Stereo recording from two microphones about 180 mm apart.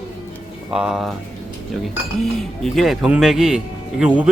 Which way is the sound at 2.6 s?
Centre (ahead or behind).